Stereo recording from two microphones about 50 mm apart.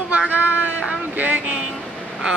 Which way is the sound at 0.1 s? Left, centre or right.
Right.